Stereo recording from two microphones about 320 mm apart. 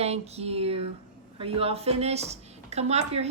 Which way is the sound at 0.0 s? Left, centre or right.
Centre.